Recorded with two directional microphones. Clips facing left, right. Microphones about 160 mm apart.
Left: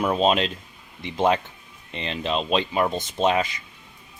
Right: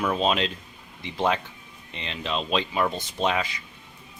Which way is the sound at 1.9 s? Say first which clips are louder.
Left 4 dB; 20° left (ahead or behind).